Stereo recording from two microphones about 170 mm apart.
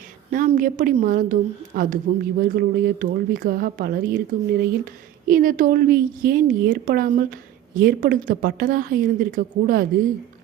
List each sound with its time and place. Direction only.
0.3 s a woman's voice: 50° right (ahead or behind)